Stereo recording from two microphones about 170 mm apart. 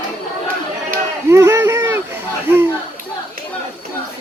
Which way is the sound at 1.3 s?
15° right (ahead or behind).